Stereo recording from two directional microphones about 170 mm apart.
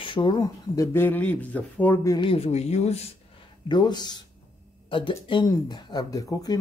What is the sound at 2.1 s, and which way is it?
Speech, 30° left (ahead or behind).